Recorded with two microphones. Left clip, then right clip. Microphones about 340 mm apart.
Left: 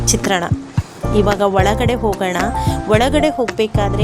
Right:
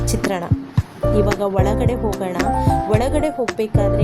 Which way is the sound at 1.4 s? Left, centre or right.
Right.